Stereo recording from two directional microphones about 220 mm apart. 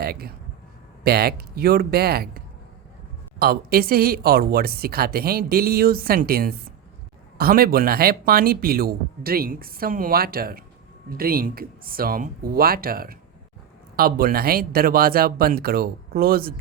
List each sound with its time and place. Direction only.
0.0 s speech: 45° right (ahead or behind)